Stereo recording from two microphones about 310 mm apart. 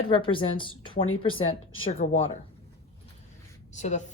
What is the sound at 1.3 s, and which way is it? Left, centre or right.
Speech, left.